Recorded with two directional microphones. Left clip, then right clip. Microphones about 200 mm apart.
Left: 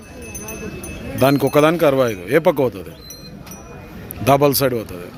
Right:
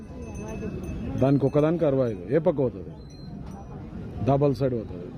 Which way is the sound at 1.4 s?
10° left (ahead or behind).